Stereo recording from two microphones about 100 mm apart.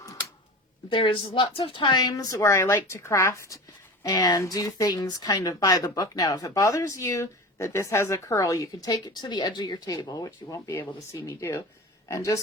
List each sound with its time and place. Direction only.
0.0 s a sound: 35° left (ahead or behind)
0.9 s speech: 60° left (ahead or behind); by 3.6 s 30° left (ahead or behind)
4.0 s speech: 45° left (ahead or behind)